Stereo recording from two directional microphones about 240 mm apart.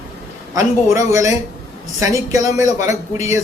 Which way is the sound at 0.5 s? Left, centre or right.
Centre.